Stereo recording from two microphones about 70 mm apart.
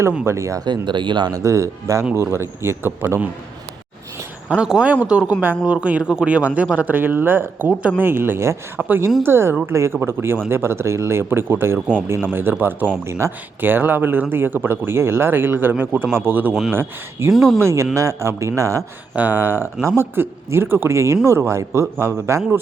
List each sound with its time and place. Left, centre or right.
0.3 s a man's voice: right
0.6 s speech: right
1.4 s a man's voice: right
4.4 s speech: centre
13.1 s a man's voice: right
13.6 s a man's voice: right
19.1 s speech: right